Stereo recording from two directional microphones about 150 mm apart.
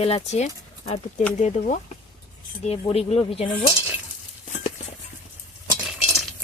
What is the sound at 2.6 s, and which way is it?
Speech, 40° left (ahead or behind).